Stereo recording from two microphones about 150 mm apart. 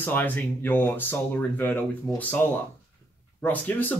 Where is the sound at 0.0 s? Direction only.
10° left (ahead or behind).